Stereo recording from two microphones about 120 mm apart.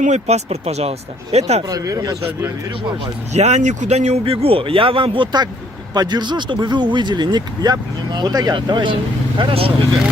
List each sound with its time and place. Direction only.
0.0 s speech: 70° right (ahead or behind)
1.7 s speech: 30° right (ahead or behind)
3.3 s a man's voice: 70° right (ahead or behind); by 9.0 s 40° right (ahead or behind)
9.4 s a man's voice: 50° right (ahead or behind)